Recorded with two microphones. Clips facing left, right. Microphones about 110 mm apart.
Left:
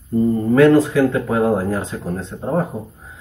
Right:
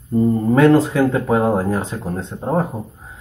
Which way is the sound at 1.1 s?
30° right (ahead or behind).